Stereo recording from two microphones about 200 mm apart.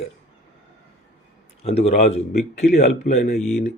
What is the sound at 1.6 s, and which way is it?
Speech, 30° left (ahead or behind).